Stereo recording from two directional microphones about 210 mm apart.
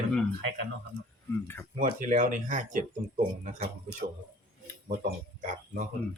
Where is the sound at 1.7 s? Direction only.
40° right (ahead or behind).